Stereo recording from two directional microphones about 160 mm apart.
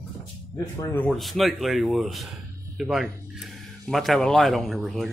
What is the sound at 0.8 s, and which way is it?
Speech, 15° left (ahead or behind).